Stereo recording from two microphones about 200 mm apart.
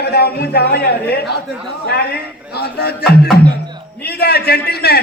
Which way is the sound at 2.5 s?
55° left (ahead or behind).